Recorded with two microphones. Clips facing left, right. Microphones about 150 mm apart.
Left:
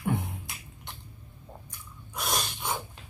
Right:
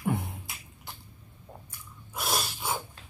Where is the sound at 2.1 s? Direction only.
5° right (ahead or behind).